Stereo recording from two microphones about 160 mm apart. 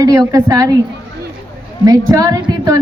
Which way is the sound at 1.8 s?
20° right (ahead or behind).